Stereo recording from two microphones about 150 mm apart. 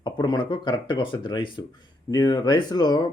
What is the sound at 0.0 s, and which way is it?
Speech, 30° left (ahead or behind).